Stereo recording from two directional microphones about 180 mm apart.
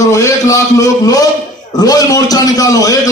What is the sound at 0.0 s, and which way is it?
A man's voice, 15° left (ahead or behind).